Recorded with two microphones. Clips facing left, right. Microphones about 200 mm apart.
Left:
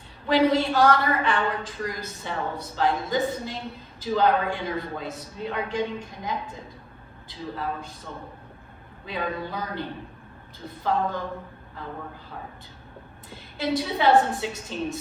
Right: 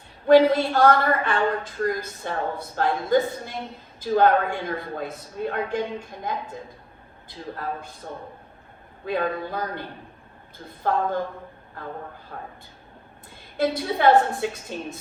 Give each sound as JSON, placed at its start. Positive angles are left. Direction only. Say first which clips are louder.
{"t": 0.3, "sound": "a man's voice", "louder": "right 5 dB", "side_deg": -50}
{"t": 9.0, "sound": "a man's voice", "louder": "right 4 dB", "side_deg": -50}
{"t": 12.3, "sound": "a man's voice", "louder": "right 2 dB", "side_deg": -50}
{"t": 13.6, "sound": "a man's voice", "louder": "right 2 dB", "side_deg": -50}